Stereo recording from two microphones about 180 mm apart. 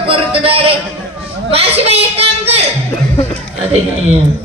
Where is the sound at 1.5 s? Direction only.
35° right (ahead or behind).